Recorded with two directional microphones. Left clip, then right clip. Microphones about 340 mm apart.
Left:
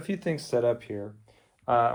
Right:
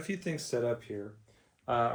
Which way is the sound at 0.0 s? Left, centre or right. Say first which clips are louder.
Left 6 dB; centre.